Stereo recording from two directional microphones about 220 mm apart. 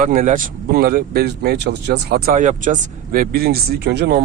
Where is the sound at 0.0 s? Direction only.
35° right (ahead or behind).